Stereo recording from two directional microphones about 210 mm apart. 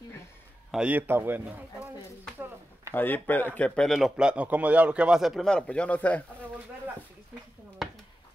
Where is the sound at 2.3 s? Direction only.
10° right (ahead or behind).